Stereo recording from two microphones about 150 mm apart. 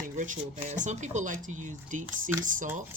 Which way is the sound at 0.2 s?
60° right (ahead or behind).